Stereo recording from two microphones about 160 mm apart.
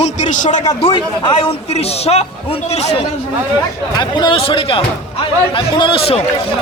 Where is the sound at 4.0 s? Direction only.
30° left (ahead or behind).